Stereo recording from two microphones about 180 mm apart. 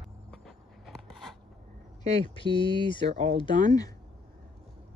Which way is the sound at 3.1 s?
40° right (ahead or behind).